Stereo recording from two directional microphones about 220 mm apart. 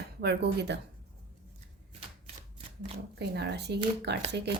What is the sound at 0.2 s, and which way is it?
Speech, 50° right (ahead or behind).